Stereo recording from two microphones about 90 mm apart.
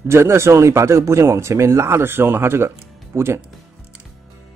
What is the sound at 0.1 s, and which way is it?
A man's voice, 30° right (ahead or behind).